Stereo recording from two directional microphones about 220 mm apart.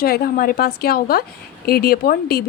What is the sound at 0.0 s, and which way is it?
A woman's voice, 45° left (ahead or behind).